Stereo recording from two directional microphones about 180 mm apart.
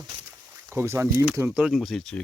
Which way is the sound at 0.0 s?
15° right (ahead or behind).